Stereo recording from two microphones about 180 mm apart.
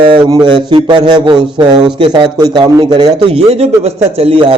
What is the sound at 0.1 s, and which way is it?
A man's voice, 25° right (ahead or behind).